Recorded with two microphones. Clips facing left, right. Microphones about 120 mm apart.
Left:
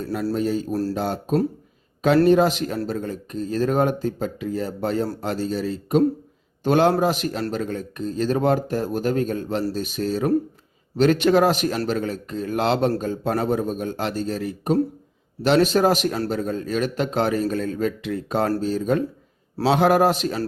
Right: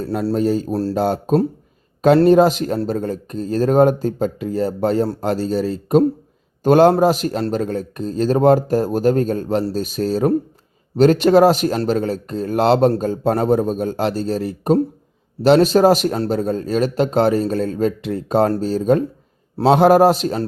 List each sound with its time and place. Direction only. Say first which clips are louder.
0.0 s a man's voice: right 4 dB; 30° right (ahead or behind)
0.3 s a man's voice: right 6 dB; 40° right (ahead or behind)
0.7 s speech: right 3 dB; 30° right (ahead or behind)
0.9 s a man's voice: right 8 dB; 40° right (ahead or behind)